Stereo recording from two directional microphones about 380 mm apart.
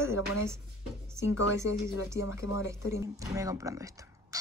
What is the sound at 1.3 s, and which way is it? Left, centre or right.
Speech, left.